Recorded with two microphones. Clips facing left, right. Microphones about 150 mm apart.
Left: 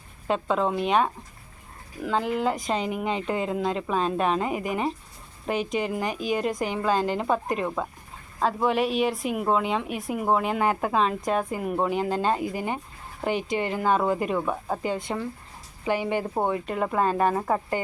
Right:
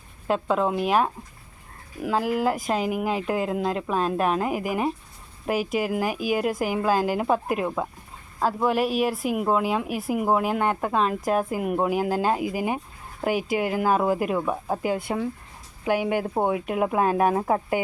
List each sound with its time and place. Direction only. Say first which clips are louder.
0.3 s speech: right 1 dB; centre (ahead or behind)